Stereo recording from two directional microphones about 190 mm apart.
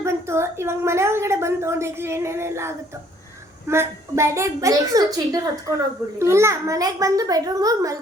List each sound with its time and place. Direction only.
0.0 s a woman's voice: 15° right (ahead or behind)